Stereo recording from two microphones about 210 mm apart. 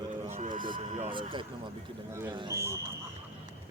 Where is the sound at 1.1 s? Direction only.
25° right (ahead or behind).